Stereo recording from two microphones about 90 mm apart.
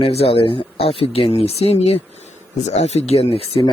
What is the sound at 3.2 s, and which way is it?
Speech, 90° left.